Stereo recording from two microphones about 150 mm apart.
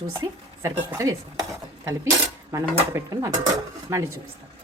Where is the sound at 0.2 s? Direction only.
20° right (ahead or behind).